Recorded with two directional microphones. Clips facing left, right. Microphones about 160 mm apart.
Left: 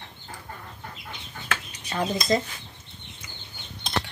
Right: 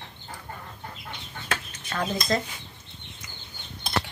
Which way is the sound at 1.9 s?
20° left (ahead or behind).